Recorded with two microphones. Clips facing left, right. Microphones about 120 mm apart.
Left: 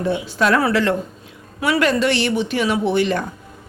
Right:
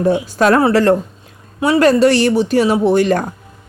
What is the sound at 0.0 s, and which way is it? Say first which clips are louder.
A woman's voice: right 6 dB; 40° right (ahead or behind).